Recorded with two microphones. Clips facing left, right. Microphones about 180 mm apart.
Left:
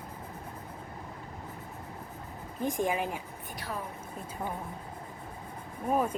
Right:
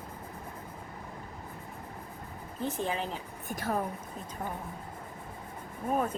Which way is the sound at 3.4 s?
45° right (ahead or behind).